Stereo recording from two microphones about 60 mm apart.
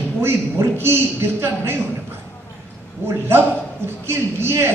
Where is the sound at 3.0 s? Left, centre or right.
Right.